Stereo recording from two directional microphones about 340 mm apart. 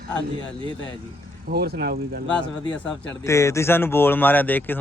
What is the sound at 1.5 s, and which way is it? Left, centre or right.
Speech, right.